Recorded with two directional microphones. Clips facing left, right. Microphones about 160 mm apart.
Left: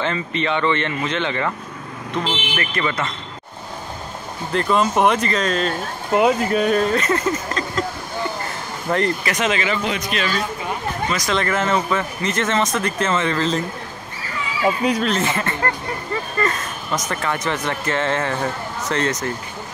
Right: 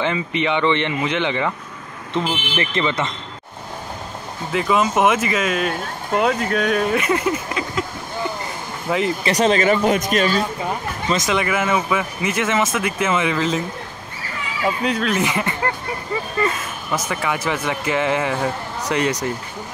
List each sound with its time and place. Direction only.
0.0 s speech: 15° right (ahead or behind)
4.5 s speech: 5° right (ahead or behind)
6.1 s speech: 5° left (ahead or behind)
6.8 s speech: 10° right (ahead or behind)
8.8 s speech: 5° right (ahead or behind)
9.2 s speech: 35° right (ahead or behind)
11.1 s speech: 20° right (ahead or behind)
11.3 s speech: 10° right (ahead or behind)
15.0 s speech: 15° right (ahead or behind)